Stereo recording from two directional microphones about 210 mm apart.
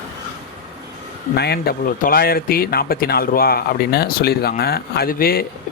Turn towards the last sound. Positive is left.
turn(degrees=45)  # may be behind; listen again after turning